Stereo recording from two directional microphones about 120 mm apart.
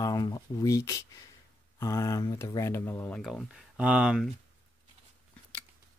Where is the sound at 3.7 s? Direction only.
10° right (ahead or behind).